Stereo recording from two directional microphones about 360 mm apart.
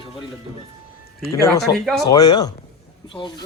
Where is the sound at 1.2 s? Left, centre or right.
Centre.